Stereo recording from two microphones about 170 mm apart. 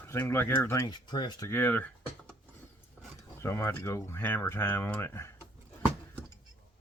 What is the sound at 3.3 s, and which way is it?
Speech, 15° left (ahead or behind).